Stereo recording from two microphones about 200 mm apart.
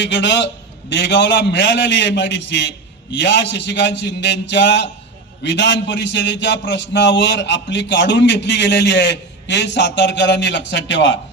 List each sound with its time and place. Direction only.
0.0 s a man's voice: 60° left (ahead or behind)